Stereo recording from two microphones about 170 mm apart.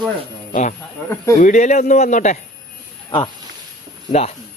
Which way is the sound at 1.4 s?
50° left (ahead or behind).